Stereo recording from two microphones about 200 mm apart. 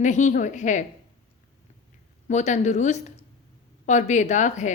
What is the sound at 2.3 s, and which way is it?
A woman's voice, 35° left (ahead or behind).